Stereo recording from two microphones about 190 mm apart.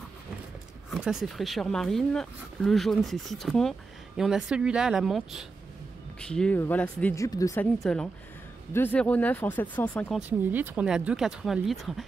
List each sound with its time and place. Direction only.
0.8 s speech: 5° right (ahead or behind); by 7.6 s 15° left (ahead or behind)
7.8 s speech: 5° left (ahead or behind)
10.1 s speech: 10° right (ahead or behind)